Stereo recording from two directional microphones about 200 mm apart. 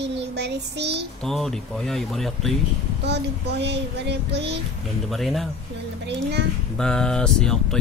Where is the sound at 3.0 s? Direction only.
55° right (ahead or behind).